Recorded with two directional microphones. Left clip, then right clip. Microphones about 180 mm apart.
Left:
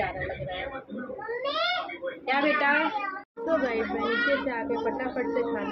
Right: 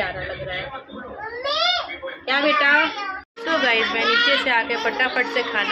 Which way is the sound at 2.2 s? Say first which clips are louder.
Right 6 dB; 5° right (ahead or behind).